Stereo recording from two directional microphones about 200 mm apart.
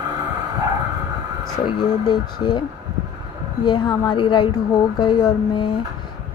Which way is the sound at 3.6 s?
20° left (ahead or behind).